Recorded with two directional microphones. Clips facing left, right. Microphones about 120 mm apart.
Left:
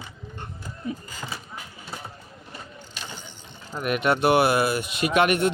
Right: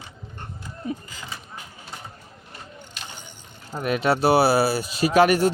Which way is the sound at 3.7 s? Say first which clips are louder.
Right 1 dB; 30° right (ahead or behind).